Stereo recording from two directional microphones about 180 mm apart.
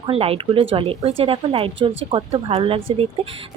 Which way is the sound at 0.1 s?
30° right (ahead or behind).